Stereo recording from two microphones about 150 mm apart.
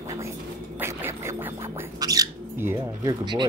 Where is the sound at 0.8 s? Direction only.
15° right (ahead or behind).